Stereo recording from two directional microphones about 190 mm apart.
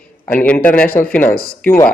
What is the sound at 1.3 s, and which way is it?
Speech, 50° left (ahead or behind).